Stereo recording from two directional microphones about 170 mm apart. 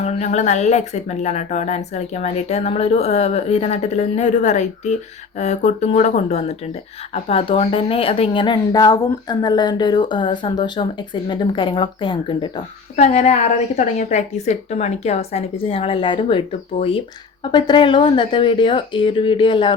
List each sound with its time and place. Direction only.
0.0 s speech: 40° left (ahead or behind)
13.0 s speech: 40° left (ahead or behind)